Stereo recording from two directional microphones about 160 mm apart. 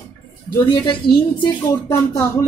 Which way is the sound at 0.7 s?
30° left (ahead or behind).